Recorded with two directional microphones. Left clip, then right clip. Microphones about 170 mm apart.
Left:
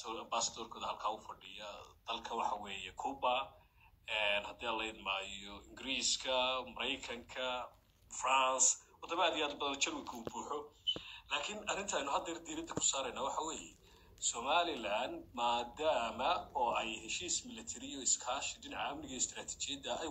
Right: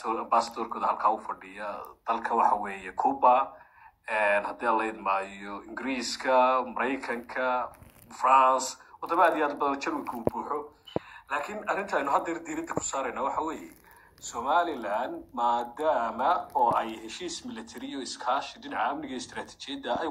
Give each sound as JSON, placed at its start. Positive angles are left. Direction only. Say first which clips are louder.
{"t": 0.0, "sound": "speech", "louder": "right 13 dB", "side_deg": -30}
{"t": 12.4, "sound": "speech", "louder": "right 9 dB", "side_deg": -40}